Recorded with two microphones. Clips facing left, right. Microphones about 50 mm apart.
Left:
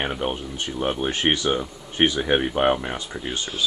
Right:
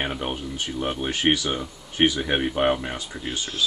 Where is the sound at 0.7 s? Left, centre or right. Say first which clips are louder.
Left 3 dB; centre.